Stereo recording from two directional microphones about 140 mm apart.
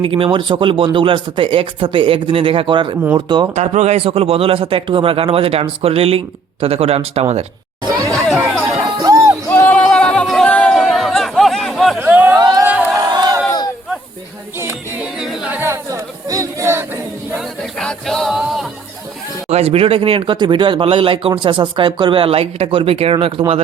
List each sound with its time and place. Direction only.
0.0 s speech: 40° right (ahead or behind)
3.5 s speech: 55° right (ahead or behind)
8.4 s speech: 15° right (ahead or behind)
9.0 s music: 25° right (ahead or behind)
9.5 s a sound: 10° left (ahead or behind)
11.9 s a sound: 10° right (ahead or behind)
12.4 s music: 30° right (ahead or behind)
13.1 s battle cry: 30° right (ahead or behind)
14.6 s music: 20° right (ahead or behind)
15.2 s a sound: 5° right (ahead or behind)
17.4 s music: centre (ahead or behind)
19.5 s speech: 45° right (ahead or behind)